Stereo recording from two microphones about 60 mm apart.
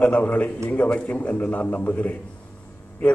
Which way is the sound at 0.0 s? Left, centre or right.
Left.